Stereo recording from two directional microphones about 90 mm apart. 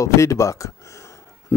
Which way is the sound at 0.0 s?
35° left (ahead or behind).